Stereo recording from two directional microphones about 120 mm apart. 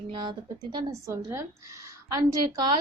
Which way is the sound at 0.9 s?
25° right (ahead or behind).